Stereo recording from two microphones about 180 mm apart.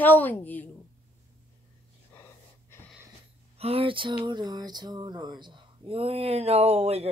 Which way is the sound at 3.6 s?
30° right (ahead or behind).